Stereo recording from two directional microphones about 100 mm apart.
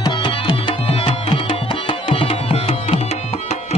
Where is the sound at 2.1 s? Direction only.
70° left (ahead or behind).